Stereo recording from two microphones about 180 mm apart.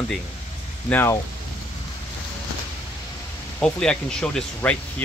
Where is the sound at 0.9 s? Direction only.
15° left (ahead or behind).